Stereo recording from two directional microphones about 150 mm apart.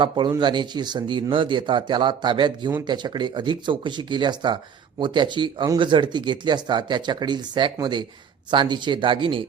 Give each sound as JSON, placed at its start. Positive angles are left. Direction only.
{"t": 0.0, "sound": "speech", "side_deg": -30}